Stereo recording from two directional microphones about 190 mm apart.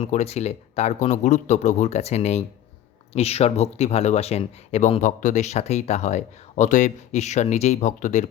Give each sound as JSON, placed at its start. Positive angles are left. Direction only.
{"t": 0.0, "sound": "speech", "side_deg": 35}